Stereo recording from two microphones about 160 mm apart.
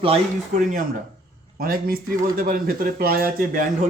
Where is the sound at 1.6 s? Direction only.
65° right (ahead or behind).